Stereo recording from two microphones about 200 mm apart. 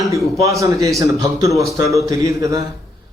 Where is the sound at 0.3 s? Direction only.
15° right (ahead or behind).